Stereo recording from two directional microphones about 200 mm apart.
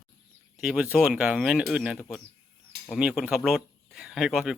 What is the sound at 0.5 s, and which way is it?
Speech, 5° right (ahead or behind).